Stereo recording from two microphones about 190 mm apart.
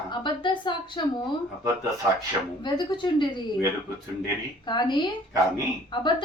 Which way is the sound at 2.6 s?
25° left (ahead or behind).